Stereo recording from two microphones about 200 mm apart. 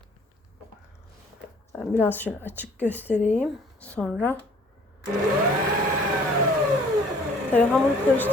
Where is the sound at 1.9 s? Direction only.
10° left (ahead or behind).